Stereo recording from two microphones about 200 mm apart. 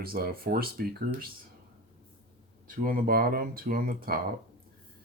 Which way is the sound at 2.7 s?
45° right (ahead or behind).